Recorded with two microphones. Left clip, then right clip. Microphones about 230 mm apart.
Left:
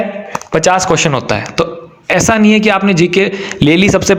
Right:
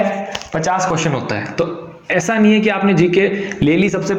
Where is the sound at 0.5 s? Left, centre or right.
Left.